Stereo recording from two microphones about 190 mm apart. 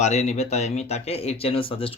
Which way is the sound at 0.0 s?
35° left (ahead or behind).